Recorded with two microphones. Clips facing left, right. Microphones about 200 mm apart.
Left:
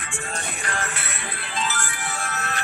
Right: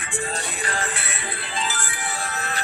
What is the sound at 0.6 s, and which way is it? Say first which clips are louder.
Music: right 2 dB; 30° right (ahead or behind).